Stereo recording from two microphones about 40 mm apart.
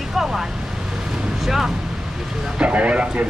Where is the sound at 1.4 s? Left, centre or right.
Centre.